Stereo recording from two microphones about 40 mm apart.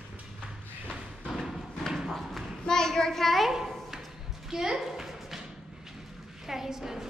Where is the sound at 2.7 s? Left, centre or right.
Centre.